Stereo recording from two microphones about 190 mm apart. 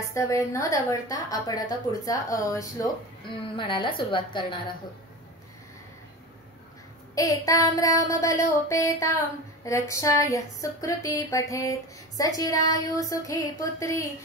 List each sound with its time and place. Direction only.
0.1 s a woman's voice: 15° left (ahead or behind)
7.2 s speech: 20° left (ahead or behind)